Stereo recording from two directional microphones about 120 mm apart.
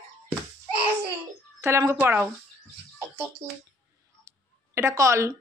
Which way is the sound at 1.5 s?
20° right (ahead or behind).